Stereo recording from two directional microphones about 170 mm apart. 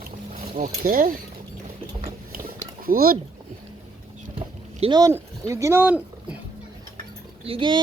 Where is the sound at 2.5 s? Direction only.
55° right (ahead or behind).